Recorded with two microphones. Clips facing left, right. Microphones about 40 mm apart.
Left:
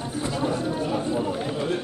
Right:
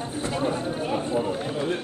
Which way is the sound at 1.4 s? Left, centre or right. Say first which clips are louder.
Even; centre.